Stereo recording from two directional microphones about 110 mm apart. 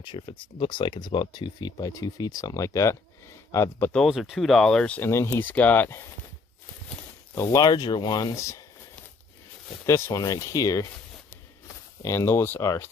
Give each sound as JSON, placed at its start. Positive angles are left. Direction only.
{"t": 0.0, "sound": "speech", "side_deg": 45}
{"t": 3.9, "sound": "speech", "side_deg": 0}
{"t": 7.3, "sound": "speech", "side_deg": 30}
{"t": 9.8, "sound": "speech", "side_deg": 25}
{"t": 12.0, "sound": "speech", "side_deg": 25}